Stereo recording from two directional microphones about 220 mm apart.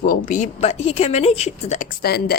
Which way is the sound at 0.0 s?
40° left (ahead or behind).